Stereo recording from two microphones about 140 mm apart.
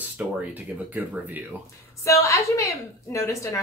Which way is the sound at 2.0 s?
20° left (ahead or behind).